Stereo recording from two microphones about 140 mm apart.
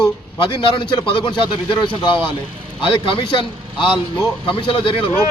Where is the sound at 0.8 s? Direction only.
35° left (ahead or behind).